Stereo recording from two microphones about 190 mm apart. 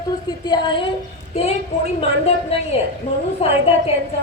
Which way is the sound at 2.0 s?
30° left (ahead or behind).